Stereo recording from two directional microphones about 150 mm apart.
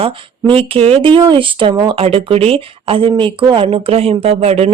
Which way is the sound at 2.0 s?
40° right (ahead or behind).